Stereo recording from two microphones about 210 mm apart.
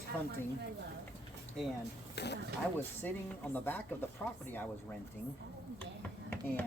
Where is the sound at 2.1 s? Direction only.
55° left (ahead or behind).